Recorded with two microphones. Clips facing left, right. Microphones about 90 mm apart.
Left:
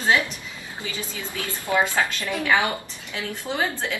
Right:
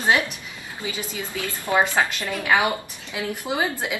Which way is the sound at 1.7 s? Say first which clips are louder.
Right 2 dB; 30° right (ahead or behind).